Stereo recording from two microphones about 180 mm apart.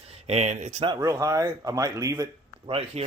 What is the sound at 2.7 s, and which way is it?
Speech, 35° right (ahead or behind).